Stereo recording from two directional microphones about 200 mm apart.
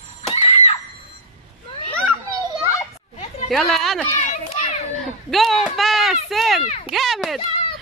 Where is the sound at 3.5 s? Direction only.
Centre (ahead or behind).